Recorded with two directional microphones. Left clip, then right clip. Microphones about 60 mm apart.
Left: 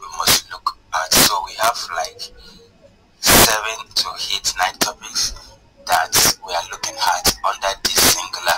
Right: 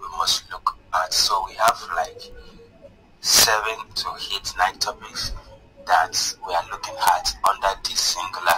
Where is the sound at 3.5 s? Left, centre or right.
Left.